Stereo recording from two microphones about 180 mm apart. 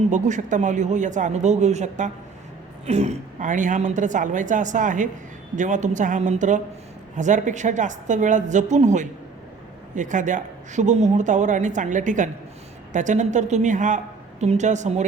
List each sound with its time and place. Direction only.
0.1 s a man's voice: 45° right (ahead or behind)